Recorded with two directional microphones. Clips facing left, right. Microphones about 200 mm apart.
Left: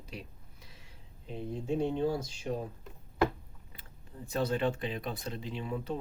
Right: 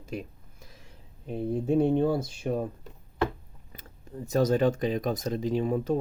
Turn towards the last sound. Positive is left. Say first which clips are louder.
# right 10 dB
turn(degrees=-45)  # may be behind; listen again after turning